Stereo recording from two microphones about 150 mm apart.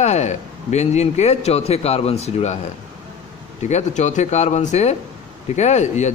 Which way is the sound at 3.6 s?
50° left (ahead or behind).